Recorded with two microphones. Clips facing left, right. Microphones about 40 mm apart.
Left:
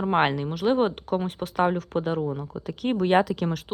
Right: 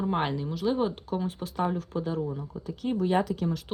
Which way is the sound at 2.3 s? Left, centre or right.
Left.